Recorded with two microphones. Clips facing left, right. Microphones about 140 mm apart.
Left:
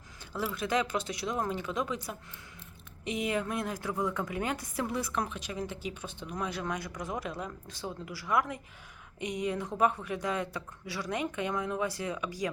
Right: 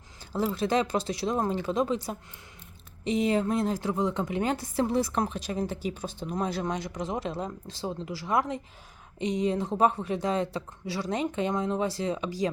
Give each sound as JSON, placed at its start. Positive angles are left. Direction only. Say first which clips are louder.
{"t": 0.3, "sound": "a woman's voice", "louder": "right 5 dB", "side_deg": -35}